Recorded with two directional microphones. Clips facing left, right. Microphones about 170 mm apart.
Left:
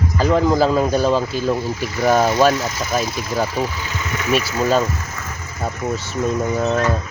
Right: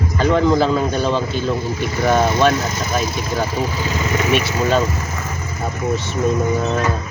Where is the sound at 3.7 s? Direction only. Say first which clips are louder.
Right 6 dB; 35° right (ahead or behind).